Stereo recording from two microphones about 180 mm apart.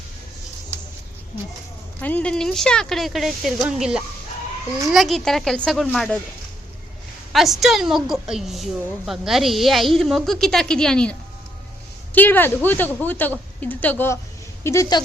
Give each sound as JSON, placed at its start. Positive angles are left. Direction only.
{"t": 2.0, "sound": "a woman's voice", "side_deg": 10}
{"t": 7.3, "sound": "a woman's voice", "side_deg": 0}